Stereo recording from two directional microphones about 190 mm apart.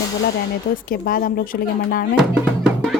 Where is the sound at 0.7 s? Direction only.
45° left (ahead or behind).